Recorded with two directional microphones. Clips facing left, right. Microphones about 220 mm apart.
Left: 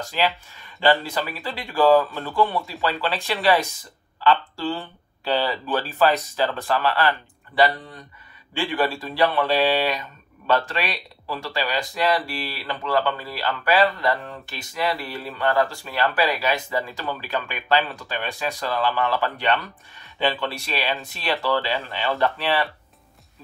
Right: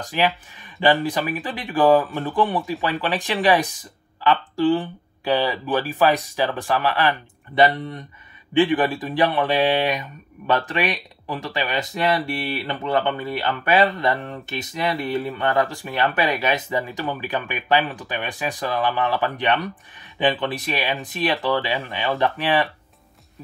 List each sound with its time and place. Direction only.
0.7 s speech: 15° right (ahead or behind)